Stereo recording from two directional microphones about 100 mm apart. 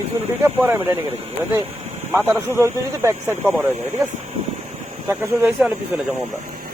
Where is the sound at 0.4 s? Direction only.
20° right (ahead or behind).